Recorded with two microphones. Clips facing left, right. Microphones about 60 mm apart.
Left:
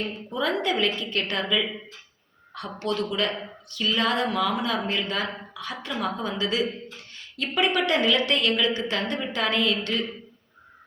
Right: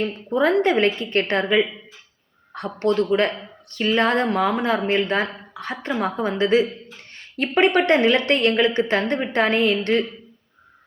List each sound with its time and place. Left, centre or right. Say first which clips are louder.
0.3 s a woman's voice: right 8 dB; right